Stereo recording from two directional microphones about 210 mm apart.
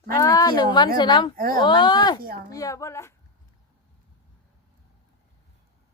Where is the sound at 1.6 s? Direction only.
20° left (ahead or behind).